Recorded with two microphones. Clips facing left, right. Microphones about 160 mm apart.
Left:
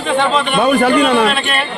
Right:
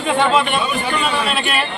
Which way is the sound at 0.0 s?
5° right (ahead or behind).